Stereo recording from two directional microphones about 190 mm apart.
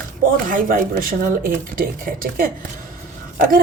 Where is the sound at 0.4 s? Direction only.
50° right (ahead or behind).